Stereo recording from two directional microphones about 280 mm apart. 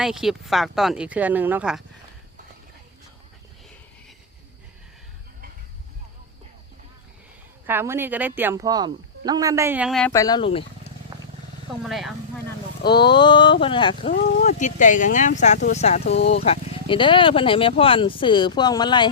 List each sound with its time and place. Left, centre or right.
0.0 s speech: centre
7.7 s speech: centre
10.1 s speech: centre
11.9 s speech: centre
12.9 s speech: centre